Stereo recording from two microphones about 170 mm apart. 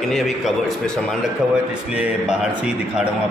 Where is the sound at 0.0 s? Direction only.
Centre (ahead or behind).